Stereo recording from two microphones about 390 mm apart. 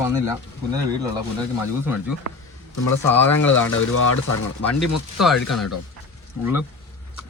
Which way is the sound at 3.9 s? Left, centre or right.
Left.